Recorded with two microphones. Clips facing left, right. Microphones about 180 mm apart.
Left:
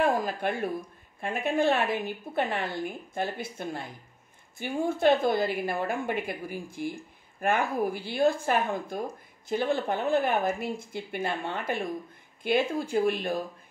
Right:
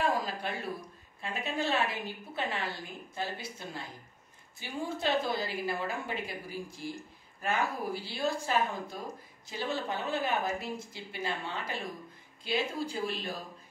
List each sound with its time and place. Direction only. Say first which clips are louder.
0.0 s a woman's voice: left 5 dB; 55° left (ahead or behind)